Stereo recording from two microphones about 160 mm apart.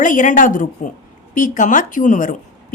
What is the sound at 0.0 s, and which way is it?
A woman's voice, 55° left (ahead or behind).